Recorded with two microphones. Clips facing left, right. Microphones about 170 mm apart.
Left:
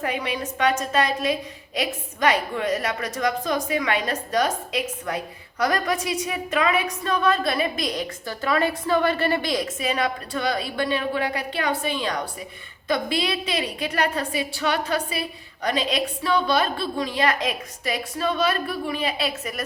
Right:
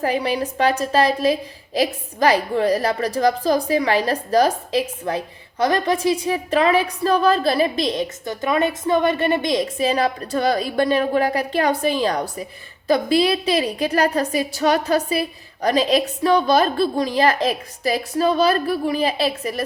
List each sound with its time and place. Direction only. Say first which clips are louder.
0.0 s a woman's voice: right 6 dB; 35° right (ahead or behind)